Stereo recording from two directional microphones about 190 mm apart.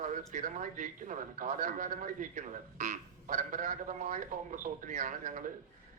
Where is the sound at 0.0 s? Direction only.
40° right (ahead or behind).